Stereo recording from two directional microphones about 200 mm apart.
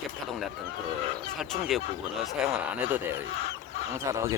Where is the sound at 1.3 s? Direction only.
Centre (ahead or behind).